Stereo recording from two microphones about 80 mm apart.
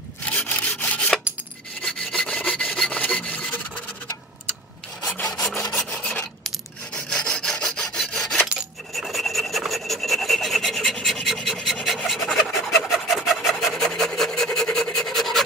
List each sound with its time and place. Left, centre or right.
0.2 s rub: centre
5.2 s filing: centre
8.9 s rub: centre